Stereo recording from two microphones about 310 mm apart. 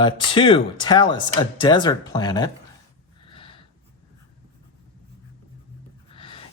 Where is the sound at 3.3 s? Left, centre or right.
Centre.